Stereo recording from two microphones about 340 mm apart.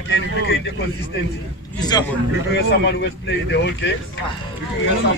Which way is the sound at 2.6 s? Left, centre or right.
Left.